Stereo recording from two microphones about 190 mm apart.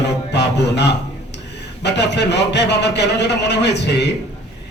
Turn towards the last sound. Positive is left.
turn(degrees=65)  # may be behind; listen again after turning